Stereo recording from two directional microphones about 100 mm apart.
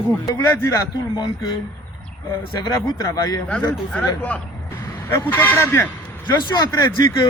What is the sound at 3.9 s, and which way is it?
Speech, 15° left (ahead or behind).